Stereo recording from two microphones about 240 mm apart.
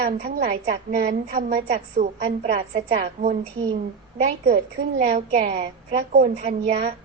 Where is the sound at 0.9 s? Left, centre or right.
Right.